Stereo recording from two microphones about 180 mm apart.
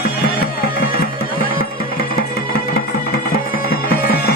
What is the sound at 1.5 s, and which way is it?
Music, 55° left (ahead or behind).